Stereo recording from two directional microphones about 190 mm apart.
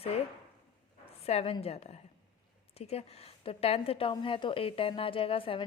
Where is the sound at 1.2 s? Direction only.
30° left (ahead or behind).